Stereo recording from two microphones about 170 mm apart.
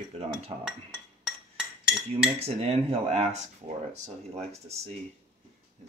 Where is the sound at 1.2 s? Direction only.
5° right (ahead or behind).